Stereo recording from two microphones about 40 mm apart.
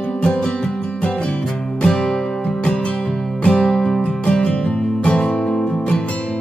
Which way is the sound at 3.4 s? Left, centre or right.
Left.